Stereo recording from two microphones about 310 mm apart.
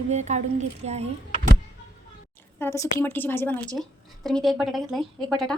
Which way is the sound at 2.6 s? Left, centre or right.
Centre.